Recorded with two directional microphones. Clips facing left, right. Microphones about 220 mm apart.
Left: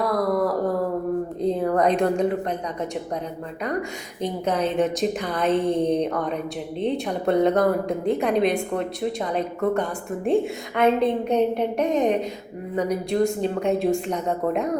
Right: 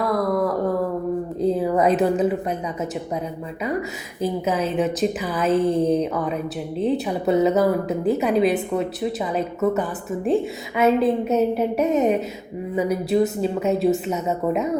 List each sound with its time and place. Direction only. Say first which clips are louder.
0.0 s a sound: right 1 dB; centre (ahead or behind)
1.4 s speech: right 2 dB; 5° right (ahead or behind)
3.6 s a woman's voice: right 2 dB; 5° right (ahead or behind)